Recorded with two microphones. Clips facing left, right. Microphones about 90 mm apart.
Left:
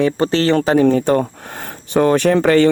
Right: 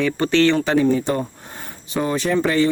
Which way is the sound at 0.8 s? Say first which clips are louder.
Left 5 dB; 55° left (ahead or behind).